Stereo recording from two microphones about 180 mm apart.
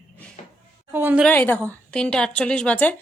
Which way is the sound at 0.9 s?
10° right (ahead or behind).